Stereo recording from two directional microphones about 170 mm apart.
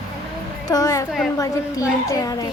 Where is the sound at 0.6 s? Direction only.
20° left (ahead or behind).